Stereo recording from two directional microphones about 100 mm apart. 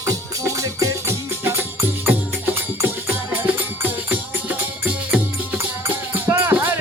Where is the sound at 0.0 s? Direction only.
30° right (ahead or behind).